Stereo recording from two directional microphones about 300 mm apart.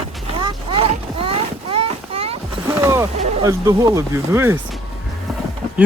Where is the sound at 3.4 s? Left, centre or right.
Centre.